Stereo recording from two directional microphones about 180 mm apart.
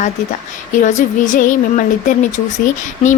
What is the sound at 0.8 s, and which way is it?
Speech, 45° left (ahead or behind).